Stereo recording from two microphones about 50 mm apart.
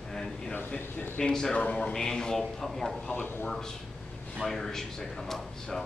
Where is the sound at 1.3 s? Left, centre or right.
Centre.